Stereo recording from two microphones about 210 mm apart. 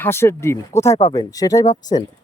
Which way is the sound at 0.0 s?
10° left (ahead or behind).